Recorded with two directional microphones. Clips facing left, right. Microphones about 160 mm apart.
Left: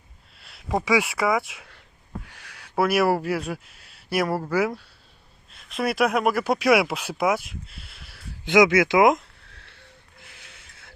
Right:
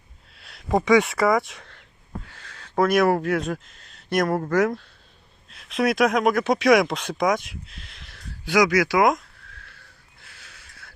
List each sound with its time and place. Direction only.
0.3 s speech: centre (ahead or behind)
2.2 s speech: 15° left (ahead or behind)
8.4 s a sound: 25° left (ahead or behind)